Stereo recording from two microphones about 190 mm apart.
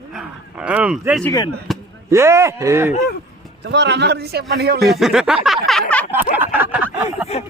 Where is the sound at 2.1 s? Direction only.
15° right (ahead or behind).